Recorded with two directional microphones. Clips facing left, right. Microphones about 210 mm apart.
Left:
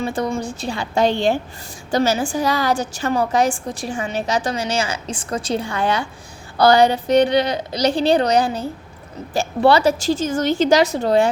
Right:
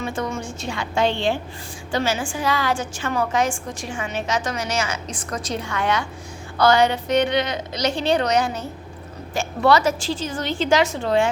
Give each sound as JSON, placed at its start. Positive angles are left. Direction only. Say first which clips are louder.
{"t": 0.0, "sound": "a woman's voice", "louder": "left 4 dB", "side_deg": 35}